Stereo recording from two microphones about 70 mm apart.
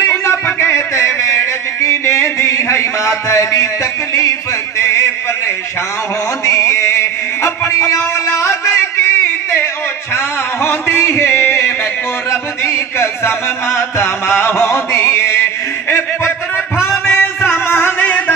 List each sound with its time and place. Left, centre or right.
0.0 s music: left
6.4 s a sound: left
10.1 s music: left